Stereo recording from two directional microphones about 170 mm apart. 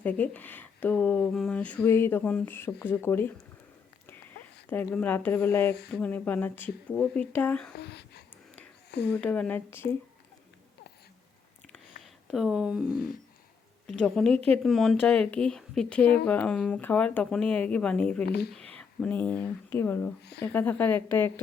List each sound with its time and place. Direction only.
0.0 s speech: 10° left (ahead or behind)
4.7 s speech: 10° left (ahead or behind)
7.8 s speech: 75° left (ahead or behind)
9.1 s speech: 10° left (ahead or behind)
12.3 s speech: centre (ahead or behind)
18.3 s speech: 70° left (ahead or behind)
18.5 s speech: 5° left (ahead or behind)